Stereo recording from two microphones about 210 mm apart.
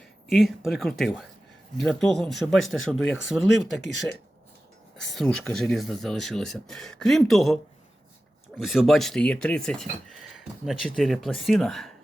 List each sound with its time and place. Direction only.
0.3 s speech: centre (ahead or behind)
4.9 s speech: centre (ahead or behind)